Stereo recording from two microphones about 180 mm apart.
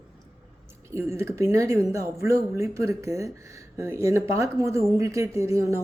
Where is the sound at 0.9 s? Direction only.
15° right (ahead or behind).